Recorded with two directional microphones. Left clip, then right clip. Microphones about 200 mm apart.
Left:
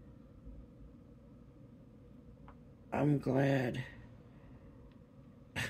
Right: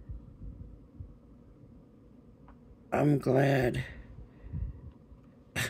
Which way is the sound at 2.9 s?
50° right (ahead or behind).